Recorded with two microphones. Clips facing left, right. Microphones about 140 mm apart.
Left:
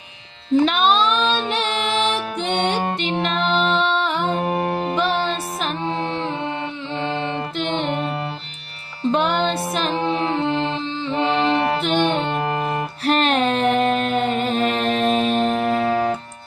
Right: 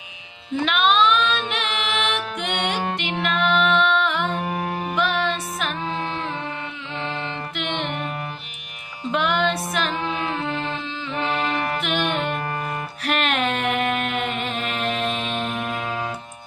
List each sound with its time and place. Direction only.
0.6 s music: 35° left (ahead or behind)
7.0 s mantra: 30° left (ahead or behind)
9.1 s music: 30° left (ahead or behind)